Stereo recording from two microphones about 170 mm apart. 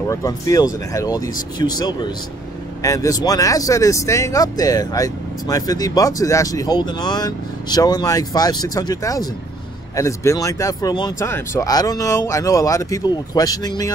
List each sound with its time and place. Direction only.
0.1 s speech: 20° left (ahead or behind)